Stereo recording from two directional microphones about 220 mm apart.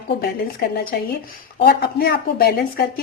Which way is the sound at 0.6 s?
45° left (ahead or behind).